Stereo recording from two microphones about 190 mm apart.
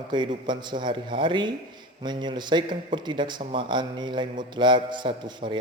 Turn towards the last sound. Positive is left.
turn(degrees=-25)  # may be behind; listen again after turning